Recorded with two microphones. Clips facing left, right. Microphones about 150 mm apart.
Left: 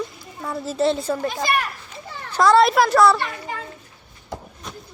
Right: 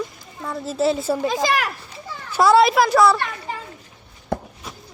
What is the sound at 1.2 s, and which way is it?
Speech, 90° right.